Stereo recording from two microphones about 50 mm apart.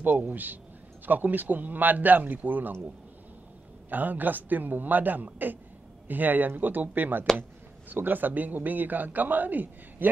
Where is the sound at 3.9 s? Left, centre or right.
Right.